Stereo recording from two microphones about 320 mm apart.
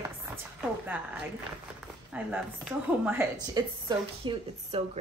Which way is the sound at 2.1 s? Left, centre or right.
Centre.